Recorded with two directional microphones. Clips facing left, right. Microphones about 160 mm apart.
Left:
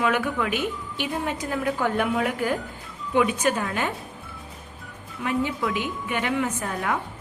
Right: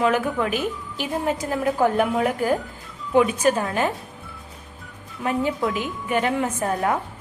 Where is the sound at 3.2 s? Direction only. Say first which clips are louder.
Right 4 dB; 30° right (ahead or behind).